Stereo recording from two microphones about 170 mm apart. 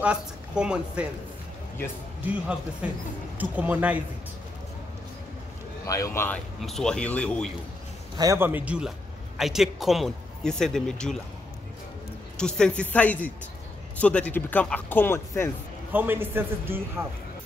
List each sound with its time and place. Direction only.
0.0 s a woman's voice: 5° right (ahead or behind)
2.2 s a woman's voice: 10° right (ahead or behind)
5.9 s speech: 20° left (ahead or behind)
6.6 s speech: 5° left (ahead or behind)
8.2 s a woman's voice: 15° right (ahead or behind); by 11.1 s 5° left (ahead or behind)
12.4 s speech: 5° left (ahead or behind)
15.9 s a woman's voice: 10° right (ahead or behind)